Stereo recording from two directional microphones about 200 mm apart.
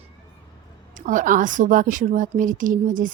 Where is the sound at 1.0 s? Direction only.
40° right (ahead or behind).